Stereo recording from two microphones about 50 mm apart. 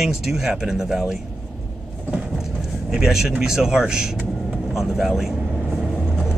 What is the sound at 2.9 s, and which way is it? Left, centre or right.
Speech, centre.